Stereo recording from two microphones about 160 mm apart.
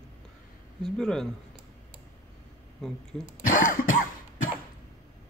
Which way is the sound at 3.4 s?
55° left (ahead or behind).